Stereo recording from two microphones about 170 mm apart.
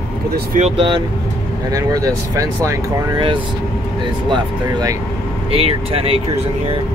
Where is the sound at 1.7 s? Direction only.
20° right (ahead or behind).